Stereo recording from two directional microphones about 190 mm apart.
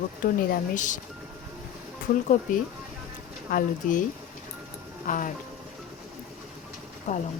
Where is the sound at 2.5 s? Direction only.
45° left (ahead or behind).